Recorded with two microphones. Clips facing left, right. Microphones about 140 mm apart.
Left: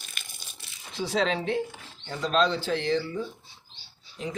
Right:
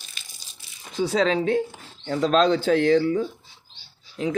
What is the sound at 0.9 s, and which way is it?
Speech, 45° right (ahead or behind).